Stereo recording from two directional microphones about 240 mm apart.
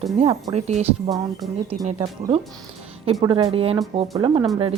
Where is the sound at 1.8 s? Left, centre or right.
Right.